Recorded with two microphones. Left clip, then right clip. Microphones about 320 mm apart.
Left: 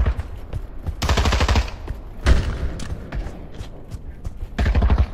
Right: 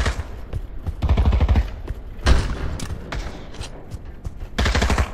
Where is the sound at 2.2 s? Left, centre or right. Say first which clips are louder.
Right 1 dB; centre.